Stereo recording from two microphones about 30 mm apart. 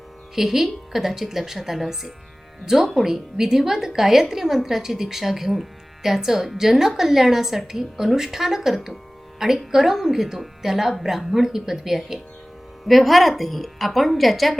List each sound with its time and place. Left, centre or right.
0.3 s a woman's voice: centre
3.0 s a woman's voice: centre
12.8 s a woman's voice: centre